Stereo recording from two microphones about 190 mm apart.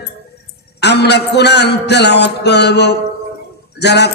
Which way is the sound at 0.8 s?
60° left (ahead or behind).